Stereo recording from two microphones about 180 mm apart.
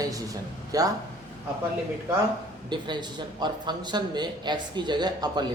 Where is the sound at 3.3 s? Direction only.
25° right (ahead or behind).